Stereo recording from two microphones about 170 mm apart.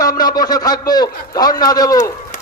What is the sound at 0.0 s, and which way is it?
A man's voice, 20° left (ahead or behind).